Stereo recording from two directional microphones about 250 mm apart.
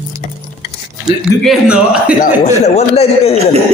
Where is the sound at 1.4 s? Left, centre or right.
Centre.